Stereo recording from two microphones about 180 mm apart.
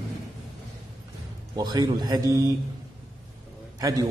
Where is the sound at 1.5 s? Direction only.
25° right (ahead or behind).